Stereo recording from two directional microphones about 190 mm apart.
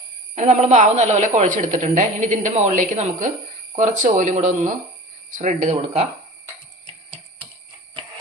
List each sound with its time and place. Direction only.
0.3 s speech: 40° right (ahead or behind)